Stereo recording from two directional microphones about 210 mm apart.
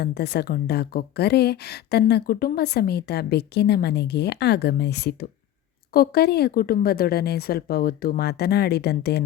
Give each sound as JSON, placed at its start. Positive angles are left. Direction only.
{"t": 0.0, "sound": "speech", "side_deg": 50}